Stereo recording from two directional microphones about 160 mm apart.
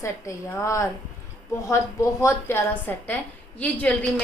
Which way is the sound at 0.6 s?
20° left (ahead or behind).